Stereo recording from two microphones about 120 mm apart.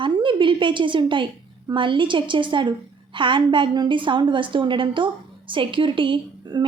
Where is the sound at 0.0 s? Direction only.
45° right (ahead or behind).